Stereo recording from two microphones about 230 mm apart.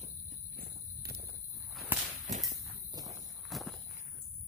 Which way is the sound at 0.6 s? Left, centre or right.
Right.